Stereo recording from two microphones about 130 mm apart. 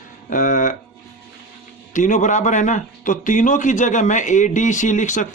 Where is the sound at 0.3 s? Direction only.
85° left.